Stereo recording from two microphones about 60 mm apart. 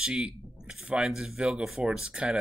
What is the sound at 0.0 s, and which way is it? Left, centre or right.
Speech, centre.